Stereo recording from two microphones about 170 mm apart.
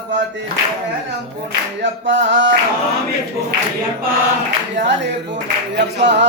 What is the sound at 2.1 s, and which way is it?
A capella, 90° right.